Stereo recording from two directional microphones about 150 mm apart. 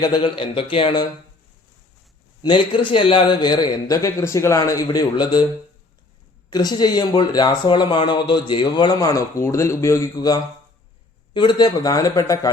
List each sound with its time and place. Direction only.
0.0 s speech: 30° left (ahead or behind)
2.4 s speech: 30° left (ahead or behind)
6.5 s speech: 25° left (ahead or behind)